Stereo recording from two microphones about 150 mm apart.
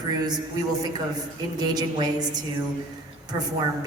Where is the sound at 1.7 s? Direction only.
30° right (ahead or behind).